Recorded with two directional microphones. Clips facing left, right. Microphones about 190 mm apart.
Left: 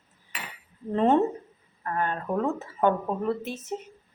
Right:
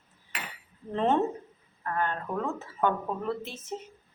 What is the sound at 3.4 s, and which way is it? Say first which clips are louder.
Speech: left 5 dB; 40° left (ahead or behind).